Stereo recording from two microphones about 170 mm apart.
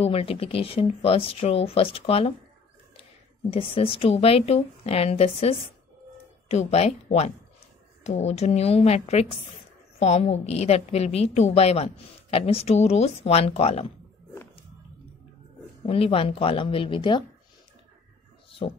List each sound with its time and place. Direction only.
0.0 s a woman's voice: 35° left (ahead or behind)
15.8 s a woman's voice: 35° left (ahead or behind)
18.6 s a woman's voice: 35° left (ahead or behind)